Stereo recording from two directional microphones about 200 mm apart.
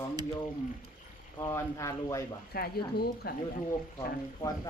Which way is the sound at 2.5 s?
50° left (ahead or behind).